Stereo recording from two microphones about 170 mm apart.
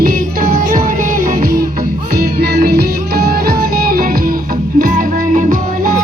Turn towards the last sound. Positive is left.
turn(degrees=-50)  # may be behind; listen again after turning